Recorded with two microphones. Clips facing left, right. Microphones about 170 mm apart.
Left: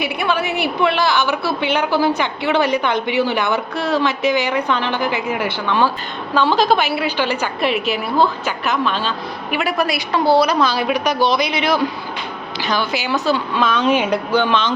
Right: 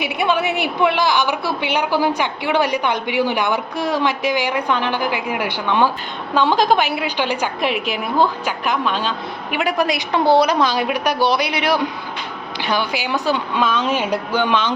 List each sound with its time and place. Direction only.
0.0 s a woman's voice: 15° right (ahead or behind)